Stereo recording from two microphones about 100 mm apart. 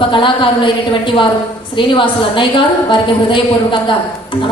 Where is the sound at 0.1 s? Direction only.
55° left (ahead or behind).